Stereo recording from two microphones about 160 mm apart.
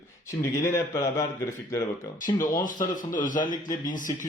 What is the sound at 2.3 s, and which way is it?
Speech, 25° left (ahead or behind).